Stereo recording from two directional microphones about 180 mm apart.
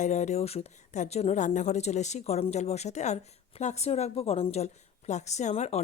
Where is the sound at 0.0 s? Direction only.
40° left (ahead or behind).